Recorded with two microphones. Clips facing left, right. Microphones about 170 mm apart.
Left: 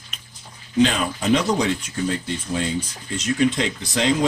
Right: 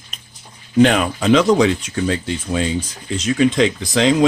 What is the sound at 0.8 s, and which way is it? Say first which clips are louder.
Speech: right 5 dB; 65° right (ahead or behind).